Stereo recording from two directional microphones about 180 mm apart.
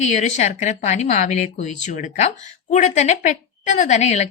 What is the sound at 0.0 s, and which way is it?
Speech, 40° left (ahead or behind).